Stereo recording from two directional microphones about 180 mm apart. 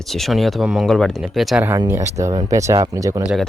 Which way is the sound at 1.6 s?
15° right (ahead or behind).